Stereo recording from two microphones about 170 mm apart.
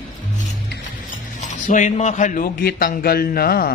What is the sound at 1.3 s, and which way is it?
Cutlery, 45° left (ahead or behind).